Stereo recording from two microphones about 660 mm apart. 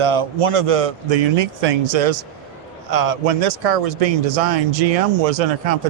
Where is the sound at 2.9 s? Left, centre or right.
Right.